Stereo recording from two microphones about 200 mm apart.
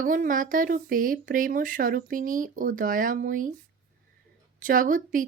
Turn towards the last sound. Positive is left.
turn(degrees=-40)  # may be behind; listen again after turning